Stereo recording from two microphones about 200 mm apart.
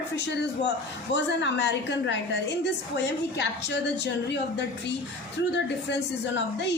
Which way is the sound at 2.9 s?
60° left (ahead or behind).